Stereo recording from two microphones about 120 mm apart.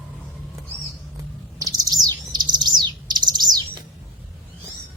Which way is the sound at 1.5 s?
30° right (ahead or behind).